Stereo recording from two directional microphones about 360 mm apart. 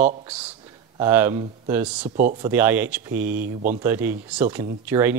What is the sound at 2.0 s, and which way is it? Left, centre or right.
Speech, right.